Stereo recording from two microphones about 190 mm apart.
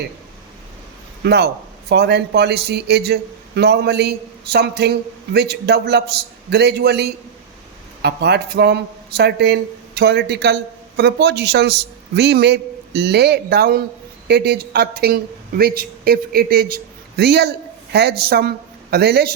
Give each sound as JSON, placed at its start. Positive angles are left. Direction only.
{"t": 1.2, "sound": "a man's voice", "side_deg": -60}